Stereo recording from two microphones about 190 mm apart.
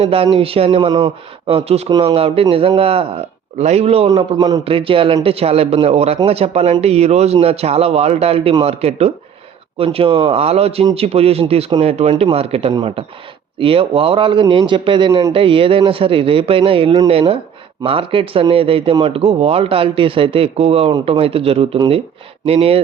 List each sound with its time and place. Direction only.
0.0 s a man's voice: 30° right (ahead or behind)